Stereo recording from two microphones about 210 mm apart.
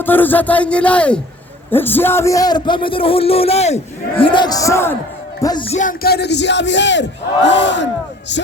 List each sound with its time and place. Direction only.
0.0 s a man's voice: 10° left (ahead or behind); by 7.9 s 60° left (ahead or behind)